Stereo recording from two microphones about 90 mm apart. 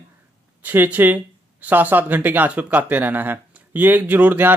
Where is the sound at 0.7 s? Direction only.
20° right (ahead or behind).